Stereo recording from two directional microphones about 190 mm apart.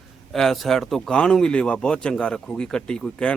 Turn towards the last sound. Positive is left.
turn(degrees=5)  # may be behind; listen again after turning